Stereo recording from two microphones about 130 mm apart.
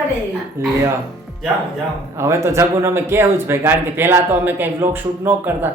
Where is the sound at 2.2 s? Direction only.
20° right (ahead or behind).